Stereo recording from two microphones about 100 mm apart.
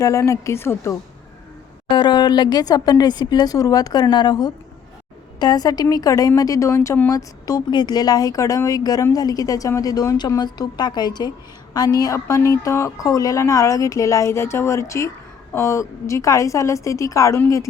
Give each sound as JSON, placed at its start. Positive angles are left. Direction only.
{"t": 0.0, "sound": "a woman's voice", "side_deg": 30}
{"t": 1.9, "sound": "a woman's voice", "side_deg": 50}